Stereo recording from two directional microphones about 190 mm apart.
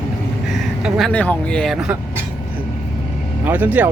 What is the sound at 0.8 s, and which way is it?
Speech, centre (ahead or behind).